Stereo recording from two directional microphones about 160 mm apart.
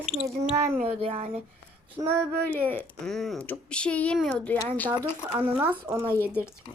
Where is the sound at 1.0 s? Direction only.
40° right (ahead or behind).